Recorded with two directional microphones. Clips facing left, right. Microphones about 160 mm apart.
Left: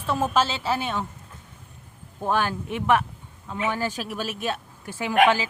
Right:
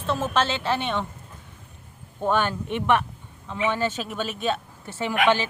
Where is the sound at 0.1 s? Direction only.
10° left (ahead or behind).